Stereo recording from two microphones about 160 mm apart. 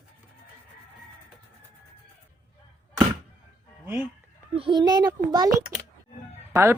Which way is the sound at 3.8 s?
10° right (ahead or behind).